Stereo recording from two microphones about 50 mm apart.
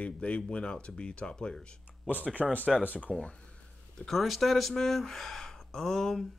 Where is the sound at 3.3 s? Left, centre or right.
Left.